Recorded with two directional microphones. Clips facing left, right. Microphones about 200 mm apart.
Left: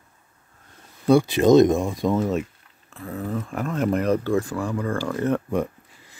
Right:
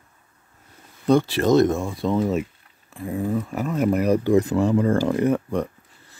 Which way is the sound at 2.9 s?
15° right (ahead or behind).